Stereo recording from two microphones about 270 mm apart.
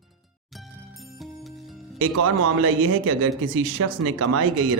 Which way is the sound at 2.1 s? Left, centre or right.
Right.